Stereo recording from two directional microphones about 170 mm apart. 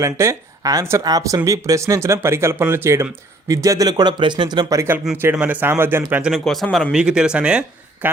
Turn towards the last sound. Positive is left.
turn(degrees=-5)  # may be behind; listen again after turning